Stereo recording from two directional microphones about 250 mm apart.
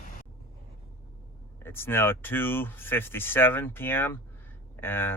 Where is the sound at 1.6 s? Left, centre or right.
Centre.